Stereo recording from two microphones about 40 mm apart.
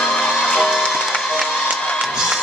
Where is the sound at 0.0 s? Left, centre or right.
Centre.